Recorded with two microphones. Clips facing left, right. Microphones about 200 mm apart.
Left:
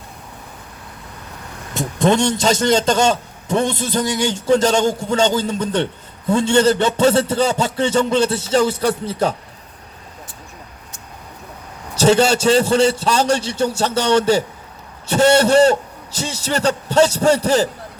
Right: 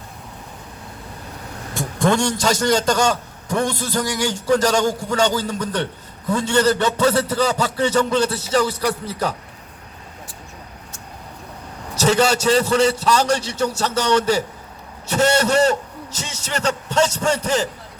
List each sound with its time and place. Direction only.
1.7 s a man's voice: 20° left (ahead or behind)
11.9 s a man's voice: 30° left (ahead or behind)